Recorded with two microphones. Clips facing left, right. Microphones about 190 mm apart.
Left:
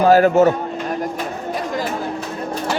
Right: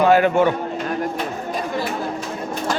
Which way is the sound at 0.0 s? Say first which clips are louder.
Left 3 dB; 40° left (ahead or behind).